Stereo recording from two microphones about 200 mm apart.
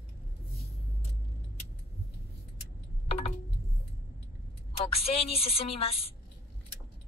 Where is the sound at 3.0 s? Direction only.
30° left (ahead or behind).